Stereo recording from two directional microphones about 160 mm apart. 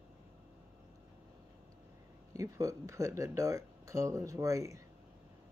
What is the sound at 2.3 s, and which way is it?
Speech, 20° right (ahead or behind).